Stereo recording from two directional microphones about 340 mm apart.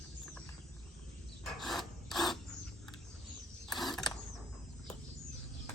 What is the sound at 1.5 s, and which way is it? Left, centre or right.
Filing, centre.